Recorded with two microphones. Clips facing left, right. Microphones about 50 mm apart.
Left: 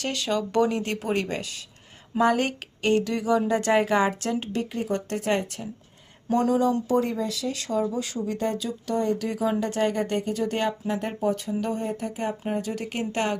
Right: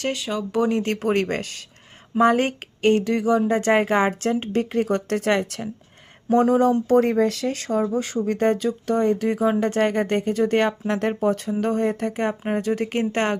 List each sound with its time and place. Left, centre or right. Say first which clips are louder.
0.1 s speech: even; centre
0.7 s speech: right 5 dB; right
2.1 s speech: right 4 dB; right
6.3 s speech: right 5 dB; right
6.8 s speech: right 7 dB; right
12.4 s speech: right 6 dB; right